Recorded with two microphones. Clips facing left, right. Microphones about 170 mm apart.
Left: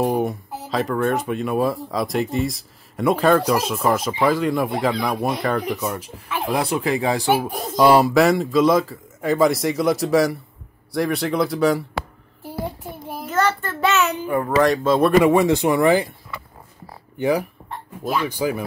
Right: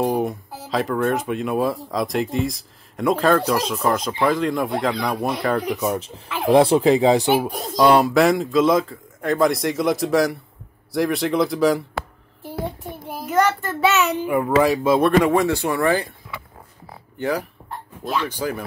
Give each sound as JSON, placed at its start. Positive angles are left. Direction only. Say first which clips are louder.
{"t": 0.0, "sound": "speech", "louder": "even", "side_deg": 0}
{"t": 5.9, "sound": "speech", "louder": "right 3 dB", "side_deg": -25}
{"t": 7.5, "sound": "speech", "louder": "left 2 dB", "side_deg": 0}
{"t": 13.3, "sound": "a child's voice", "louder": "right 2 dB", "side_deg": -10}
{"t": 15.0, "sound": "speech", "louder": "left 4 dB", "side_deg": 0}
{"t": 17.2, "sound": "speech", "louder": "left 4 dB", "side_deg": 15}